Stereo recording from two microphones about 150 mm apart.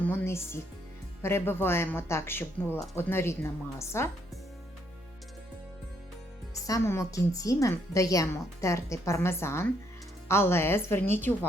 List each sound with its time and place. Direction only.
0.0 s speech: 10° left (ahead or behind)
6.7 s a woman's voice: 20° left (ahead or behind)